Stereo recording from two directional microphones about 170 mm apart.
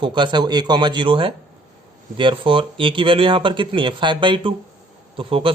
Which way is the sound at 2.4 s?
30° right (ahead or behind).